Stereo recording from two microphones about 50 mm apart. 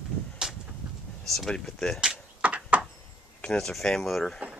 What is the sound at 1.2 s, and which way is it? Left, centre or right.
Speech, centre.